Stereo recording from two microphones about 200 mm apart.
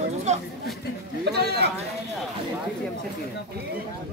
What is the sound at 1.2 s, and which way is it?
Chatter, 55° right (ahead or behind).